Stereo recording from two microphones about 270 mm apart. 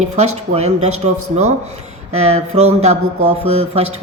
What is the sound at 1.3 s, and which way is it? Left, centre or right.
Speech, right.